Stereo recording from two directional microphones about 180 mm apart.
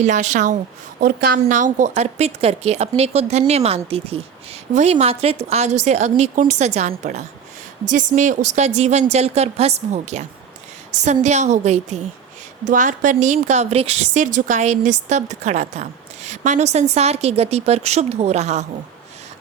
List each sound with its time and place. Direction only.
0.0 s a woman's voice: 40° right (ahead or behind)